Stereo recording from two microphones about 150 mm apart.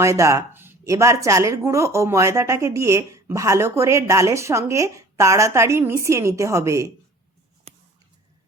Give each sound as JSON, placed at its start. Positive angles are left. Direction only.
{"t": 0.0, "sound": "speech", "side_deg": -20}